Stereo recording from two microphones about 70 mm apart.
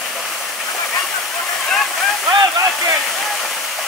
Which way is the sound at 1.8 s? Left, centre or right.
Centre.